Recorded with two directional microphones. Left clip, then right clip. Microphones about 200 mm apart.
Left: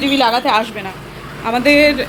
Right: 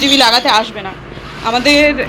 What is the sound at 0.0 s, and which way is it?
A woman's voice, centre (ahead or behind).